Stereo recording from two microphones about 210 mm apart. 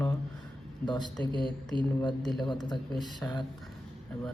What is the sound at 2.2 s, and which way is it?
Speech, centre (ahead or behind).